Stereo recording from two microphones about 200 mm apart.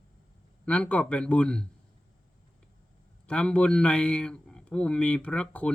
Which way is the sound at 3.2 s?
5° left (ahead or behind).